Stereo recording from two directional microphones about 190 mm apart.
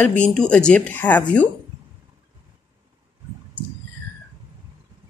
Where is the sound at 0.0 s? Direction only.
5° left (ahead or behind).